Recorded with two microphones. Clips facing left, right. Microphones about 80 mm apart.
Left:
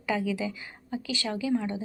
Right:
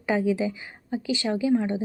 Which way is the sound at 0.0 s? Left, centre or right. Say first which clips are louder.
Right 5 dB; right.